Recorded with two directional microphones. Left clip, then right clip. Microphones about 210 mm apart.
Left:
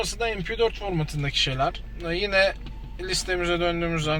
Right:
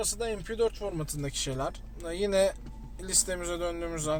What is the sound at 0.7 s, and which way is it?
Speech, 65° right (ahead or behind).